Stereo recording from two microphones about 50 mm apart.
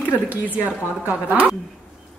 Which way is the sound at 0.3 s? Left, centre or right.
Right.